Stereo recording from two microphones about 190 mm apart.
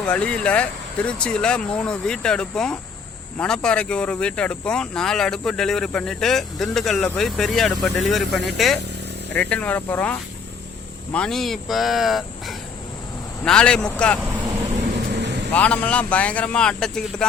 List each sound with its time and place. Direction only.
0.0 s speech: 5° left (ahead or behind)
13.4 s speech: 5° left (ahead or behind)
15.1 s vehicle: 65° right (ahead or behind)
15.5 s speech: 5° left (ahead or behind)